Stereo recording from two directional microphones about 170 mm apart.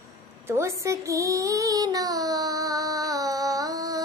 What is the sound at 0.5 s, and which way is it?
Child singing, 15° right (ahead or behind).